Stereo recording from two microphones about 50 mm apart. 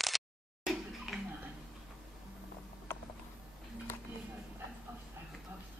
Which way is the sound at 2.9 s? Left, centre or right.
Left.